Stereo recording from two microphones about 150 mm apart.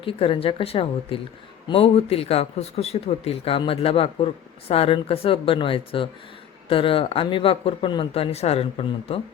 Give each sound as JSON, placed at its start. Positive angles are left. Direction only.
{"t": 0.0, "sound": "speech", "side_deg": 35}